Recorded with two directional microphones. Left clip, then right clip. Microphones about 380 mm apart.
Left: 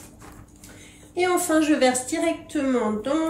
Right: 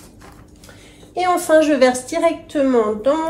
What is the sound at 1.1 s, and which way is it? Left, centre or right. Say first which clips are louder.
A woman's voice: right 7 dB; centre.